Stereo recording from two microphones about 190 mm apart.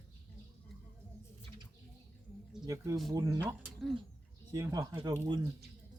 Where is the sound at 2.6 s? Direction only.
15° right (ahead or behind).